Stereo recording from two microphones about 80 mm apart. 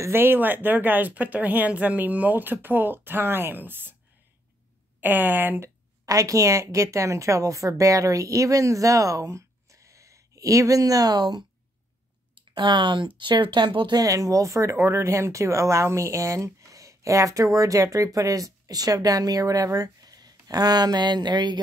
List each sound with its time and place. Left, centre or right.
0.0 s speech: right
5.0 s speech: right
6.0 s speech: right
12.4 s speech: right
13.2 s speech: right
13.9 s speech: right